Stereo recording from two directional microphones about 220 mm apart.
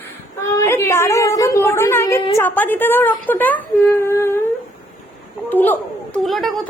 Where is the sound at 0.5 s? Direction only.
10° left (ahead or behind).